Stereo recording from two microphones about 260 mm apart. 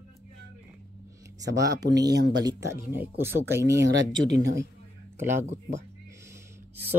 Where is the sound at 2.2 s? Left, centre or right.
Right.